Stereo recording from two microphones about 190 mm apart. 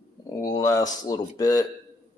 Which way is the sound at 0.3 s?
20° left (ahead or behind).